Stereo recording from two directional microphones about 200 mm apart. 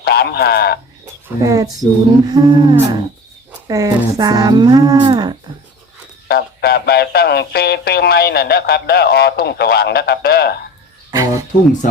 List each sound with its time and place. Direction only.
0.0 s speech: 50° left (ahead or behind)
1.4 s speech: 15° right (ahead or behind)
6.2 s speech: 55° left (ahead or behind)
11.1 s speech: 15° right (ahead or behind)